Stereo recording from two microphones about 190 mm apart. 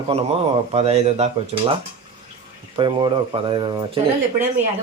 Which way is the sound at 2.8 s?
25° right (ahead or behind).